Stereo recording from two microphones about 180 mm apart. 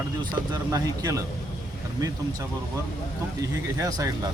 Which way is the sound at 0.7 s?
20° right (ahead or behind).